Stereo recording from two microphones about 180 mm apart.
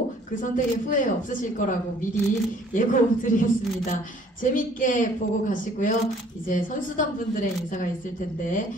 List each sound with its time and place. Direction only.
0.4 s speech: 45° left (ahead or behind)